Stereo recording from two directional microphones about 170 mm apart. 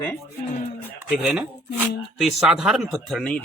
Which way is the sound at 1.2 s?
5° right (ahead or behind).